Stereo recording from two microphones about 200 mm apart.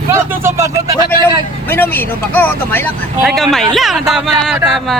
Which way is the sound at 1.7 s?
10° left (ahead or behind).